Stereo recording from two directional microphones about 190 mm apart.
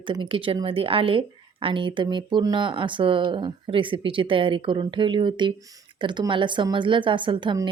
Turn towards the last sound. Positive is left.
turn(degrees=-25)  # may be behind; listen again after turning